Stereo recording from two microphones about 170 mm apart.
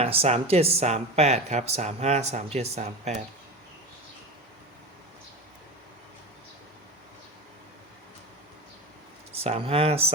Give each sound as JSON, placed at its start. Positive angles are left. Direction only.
{"t": 0.0, "sound": "speech", "side_deg": -35}
{"t": 9.3, "sound": "speech", "side_deg": -35}